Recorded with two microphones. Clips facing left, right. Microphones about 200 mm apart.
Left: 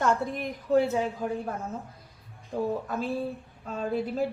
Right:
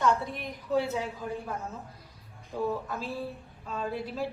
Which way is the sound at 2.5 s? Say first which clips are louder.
Left 2 dB; 50° left (ahead or behind).